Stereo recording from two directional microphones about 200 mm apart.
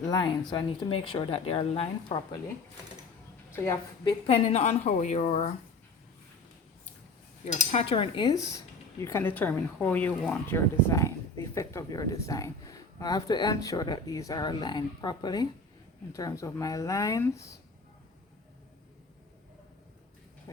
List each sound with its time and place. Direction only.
0.0 s speech: 20° left (ahead or behind)
3.5 s a woman's voice: 10° left (ahead or behind)
4.3 s a woman's voice: 30° left (ahead or behind)
7.7 s speech: 30° left (ahead or behind)